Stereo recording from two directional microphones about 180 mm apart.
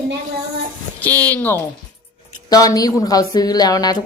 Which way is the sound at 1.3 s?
10° left (ahead or behind).